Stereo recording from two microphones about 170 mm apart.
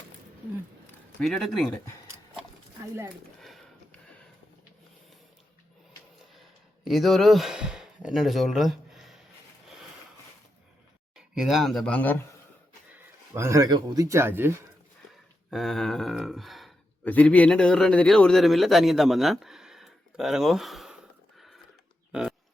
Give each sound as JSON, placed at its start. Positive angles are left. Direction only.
{"t": 1.2, "sound": "speech", "side_deg": 0}
{"t": 3.4, "sound": "a sound", "side_deg": 0}
{"t": 6.8, "sound": "speech", "side_deg": 0}
{"t": 11.3, "sound": "speech", "side_deg": 0}
{"t": 13.3, "sound": "speech", "side_deg": -15}
{"t": 15.4, "sound": "speech", "side_deg": 0}
{"t": 21.3, "sound": "a sound", "side_deg": 0}